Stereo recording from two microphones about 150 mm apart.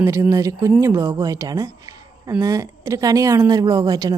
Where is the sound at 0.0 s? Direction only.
20° right (ahead or behind).